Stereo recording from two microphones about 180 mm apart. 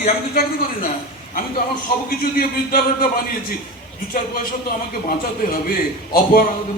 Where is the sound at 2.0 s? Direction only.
55° left (ahead or behind).